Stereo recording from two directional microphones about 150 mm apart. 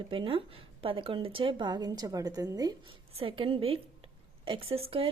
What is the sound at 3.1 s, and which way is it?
A woman's voice, 40° right (ahead or behind).